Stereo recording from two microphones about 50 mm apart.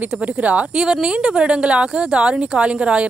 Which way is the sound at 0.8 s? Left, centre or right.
Centre.